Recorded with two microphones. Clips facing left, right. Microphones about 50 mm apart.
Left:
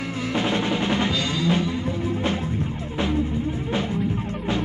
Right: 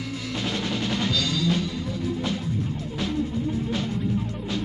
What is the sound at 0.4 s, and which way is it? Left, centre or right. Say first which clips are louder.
Music: left 5 dB; left.